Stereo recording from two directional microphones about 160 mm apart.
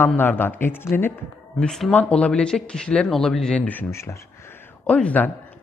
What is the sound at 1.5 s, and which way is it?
Speech, 5° left (ahead or behind).